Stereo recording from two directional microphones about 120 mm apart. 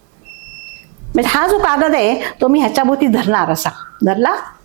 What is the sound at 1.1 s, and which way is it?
A woman's voice, 20° right (ahead or behind).